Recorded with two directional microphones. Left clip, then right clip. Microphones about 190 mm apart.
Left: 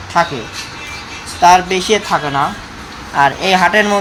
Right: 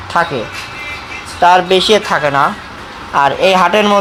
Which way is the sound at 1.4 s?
20° right (ahead or behind).